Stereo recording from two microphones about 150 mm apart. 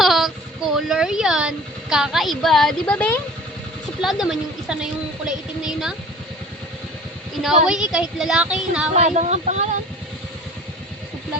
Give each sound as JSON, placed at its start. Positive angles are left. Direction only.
{"t": 0.0, "sound": "a sound", "side_deg": 0}
{"t": 4.0, "sound": "a woman's voice", "side_deg": 0}
{"t": 7.4, "sound": "a woman's voice", "side_deg": -5}
{"t": 8.9, "sound": "speech", "side_deg": -50}